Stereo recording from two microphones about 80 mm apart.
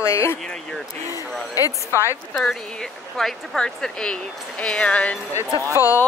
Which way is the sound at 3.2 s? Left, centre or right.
Centre.